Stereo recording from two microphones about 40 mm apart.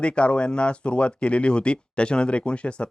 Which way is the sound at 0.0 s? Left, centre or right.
Left.